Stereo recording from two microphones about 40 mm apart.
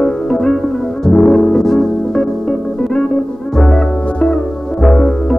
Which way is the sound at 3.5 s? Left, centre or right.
Centre.